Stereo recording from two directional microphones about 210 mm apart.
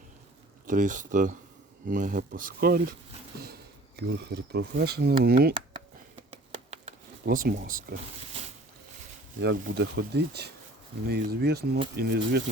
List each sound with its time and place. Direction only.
0.7 s speech: 40° right (ahead or behind)
7.3 s speech: 40° right (ahead or behind)
9.4 s speech: 50° right (ahead or behind)